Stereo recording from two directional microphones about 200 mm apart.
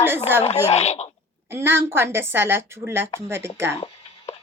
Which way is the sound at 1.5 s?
10° right (ahead or behind).